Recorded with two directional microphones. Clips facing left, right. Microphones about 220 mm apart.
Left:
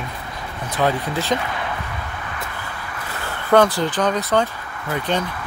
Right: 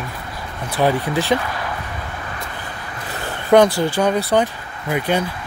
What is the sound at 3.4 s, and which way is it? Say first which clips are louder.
Speech: right 3 dB; 15° right (ahead or behind).